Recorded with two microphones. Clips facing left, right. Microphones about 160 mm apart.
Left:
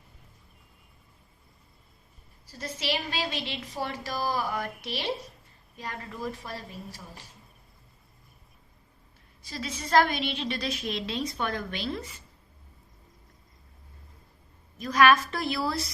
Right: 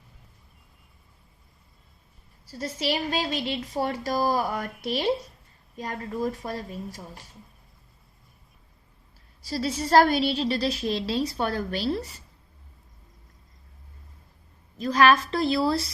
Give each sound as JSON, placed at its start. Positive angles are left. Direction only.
{"t": 2.5, "sound": "a woman's voice", "side_deg": -40}
{"t": 9.4, "sound": "a woman's voice", "side_deg": -40}
{"t": 14.8, "sound": "a woman's voice", "side_deg": -30}